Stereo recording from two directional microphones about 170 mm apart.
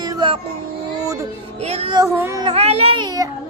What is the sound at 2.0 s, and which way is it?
Child singing, 20° right (ahead or behind).